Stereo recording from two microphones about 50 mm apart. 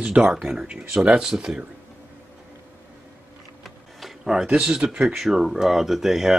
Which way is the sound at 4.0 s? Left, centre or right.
Centre.